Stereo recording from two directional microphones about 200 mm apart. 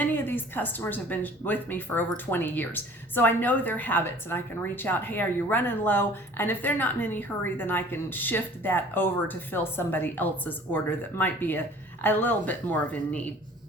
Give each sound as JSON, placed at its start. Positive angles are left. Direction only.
{"t": 0.0, "sound": "speech", "side_deg": 10}